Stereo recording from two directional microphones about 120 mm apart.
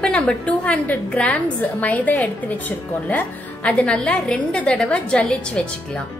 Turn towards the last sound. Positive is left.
turn(degrees=10)  # may be behind; listen again after turning